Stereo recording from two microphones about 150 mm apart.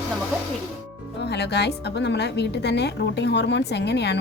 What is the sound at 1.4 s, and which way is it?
A woman's voice, 90° left.